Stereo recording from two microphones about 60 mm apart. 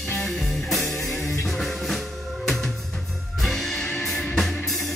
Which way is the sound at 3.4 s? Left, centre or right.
Centre.